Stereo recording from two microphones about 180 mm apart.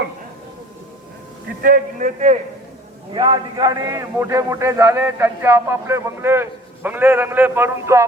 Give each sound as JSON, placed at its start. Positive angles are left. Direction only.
{"t": 1.6, "sound": "a man's voice", "side_deg": -50}
{"t": 3.1, "sound": "a man's voice", "side_deg": -25}